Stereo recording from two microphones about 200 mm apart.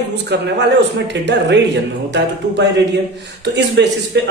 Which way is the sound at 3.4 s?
60° right (ahead or behind).